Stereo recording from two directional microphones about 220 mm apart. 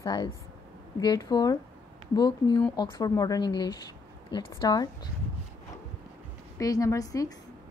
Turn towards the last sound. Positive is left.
turn(degrees=15)  # may be behind; listen again after turning